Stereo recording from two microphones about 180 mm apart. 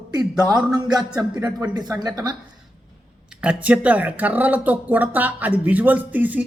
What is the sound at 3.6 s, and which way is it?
Speech, 10° right (ahead or behind).